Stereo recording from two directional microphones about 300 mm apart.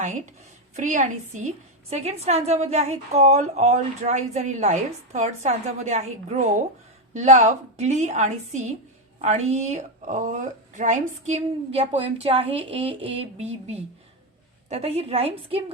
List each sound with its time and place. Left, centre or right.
0.8 s a woman's voice: right